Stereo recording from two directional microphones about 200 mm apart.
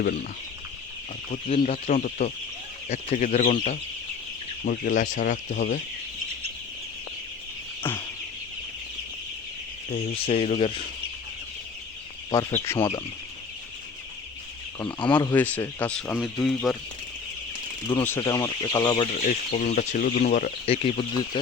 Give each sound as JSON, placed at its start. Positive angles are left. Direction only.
{"t": 1.5, "sound": "speech", "side_deg": 30}
{"t": 7.9, "sound": "speech", "side_deg": 10}
{"t": 9.9, "sound": "speech", "side_deg": 30}
{"t": 12.3, "sound": "speech", "side_deg": 20}
{"t": 14.9, "sound": "speech", "side_deg": 25}
{"t": 15.4, "sound": "speech", "side_deg": 10}
{"t": 17.9, "sound": "speech", "side_deg": 10}
{"t": 19.2, "sound": "speech", "side_deg": 45}
{"t": 20.7, "sound": "speech", "side_deg": 30}